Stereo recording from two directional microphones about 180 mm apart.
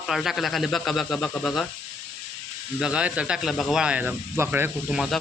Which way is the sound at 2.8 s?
5° right (ahead or behind).